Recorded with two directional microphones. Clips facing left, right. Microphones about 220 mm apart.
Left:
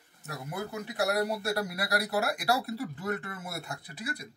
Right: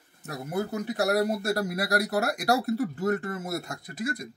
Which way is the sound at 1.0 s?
45° right (ahead or behind).